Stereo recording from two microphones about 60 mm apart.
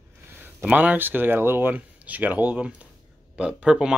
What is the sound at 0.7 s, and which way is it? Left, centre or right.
Speech, right.